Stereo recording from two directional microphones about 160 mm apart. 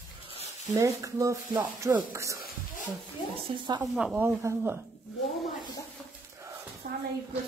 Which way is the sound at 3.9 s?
5° right (ahead or behind).